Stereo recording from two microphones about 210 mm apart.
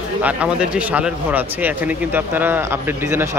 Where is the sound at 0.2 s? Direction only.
5° right (ahead or behind).